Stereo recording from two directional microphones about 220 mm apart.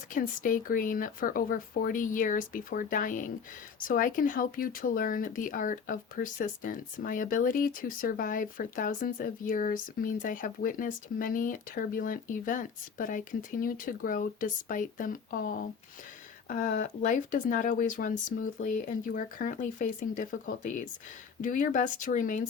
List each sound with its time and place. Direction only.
0.1 s speech: 40° left (ahead or behind)